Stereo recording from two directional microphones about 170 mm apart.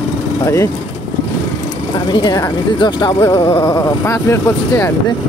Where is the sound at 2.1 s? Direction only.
25° left (ahead or behind).